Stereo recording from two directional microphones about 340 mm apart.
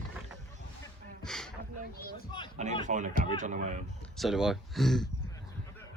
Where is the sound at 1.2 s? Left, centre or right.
Centre.